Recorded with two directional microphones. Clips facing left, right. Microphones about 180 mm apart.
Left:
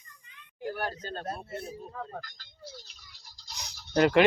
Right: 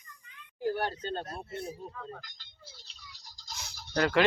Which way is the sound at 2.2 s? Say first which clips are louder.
Left 8 dB; 25° right (ahead or behind).